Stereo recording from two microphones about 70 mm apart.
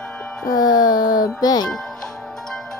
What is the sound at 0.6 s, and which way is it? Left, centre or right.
A child's voice, left.